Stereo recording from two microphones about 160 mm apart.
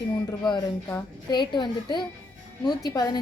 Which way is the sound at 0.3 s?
25° left (ahead or behind).